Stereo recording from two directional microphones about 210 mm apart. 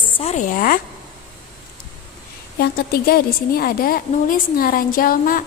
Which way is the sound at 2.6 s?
45° left (ahead or behind).